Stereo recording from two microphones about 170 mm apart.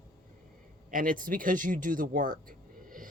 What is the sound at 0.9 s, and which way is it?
Speech, 55° right (ahead or behind).